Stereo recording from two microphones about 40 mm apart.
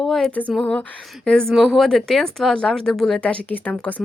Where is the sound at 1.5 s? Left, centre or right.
Centre.